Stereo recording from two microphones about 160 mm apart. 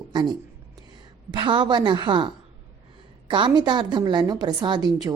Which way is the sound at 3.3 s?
30° right (ahead or behind).